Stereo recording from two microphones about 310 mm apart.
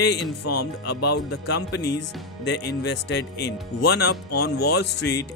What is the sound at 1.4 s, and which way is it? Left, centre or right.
Speech, left.